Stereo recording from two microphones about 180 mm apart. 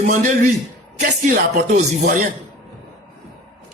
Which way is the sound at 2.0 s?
50° right (ahead or behind).